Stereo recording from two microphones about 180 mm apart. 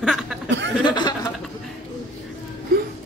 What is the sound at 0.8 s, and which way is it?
Speech, 25° left (ahead or behind).